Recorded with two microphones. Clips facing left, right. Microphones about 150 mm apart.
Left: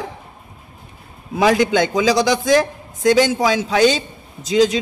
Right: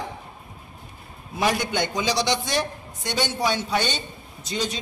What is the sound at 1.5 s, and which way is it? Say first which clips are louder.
A man's voice: left 9 dB; 90° left.